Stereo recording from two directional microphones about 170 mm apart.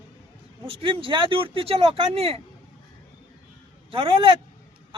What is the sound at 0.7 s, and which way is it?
Speech, 30° right (ahead or behind).